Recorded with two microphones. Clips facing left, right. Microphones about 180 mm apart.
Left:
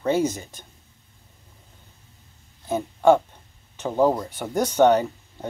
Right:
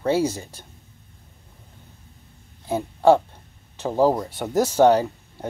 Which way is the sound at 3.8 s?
10° right (ahead or behind).